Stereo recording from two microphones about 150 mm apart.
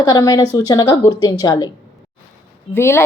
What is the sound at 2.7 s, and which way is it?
Speech, 15° left (ahead or behind).